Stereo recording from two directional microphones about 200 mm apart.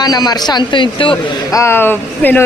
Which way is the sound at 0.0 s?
20° left (ahead or behind).